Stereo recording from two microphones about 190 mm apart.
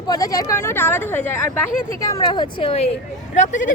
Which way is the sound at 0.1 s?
20° left (ahead or behind).